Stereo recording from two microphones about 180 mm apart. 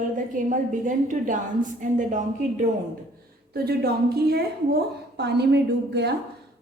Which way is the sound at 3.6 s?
60° right (ahead or behind).